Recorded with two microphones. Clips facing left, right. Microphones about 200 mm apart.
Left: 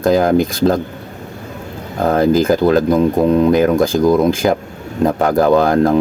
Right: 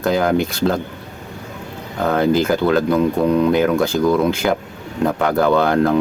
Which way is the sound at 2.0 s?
35° left (ahead or behind).